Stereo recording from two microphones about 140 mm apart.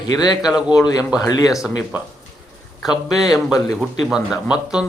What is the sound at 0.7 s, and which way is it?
Speech, 25° left (ahead or behind).